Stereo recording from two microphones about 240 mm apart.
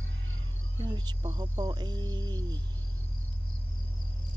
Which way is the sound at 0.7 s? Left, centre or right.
Centre.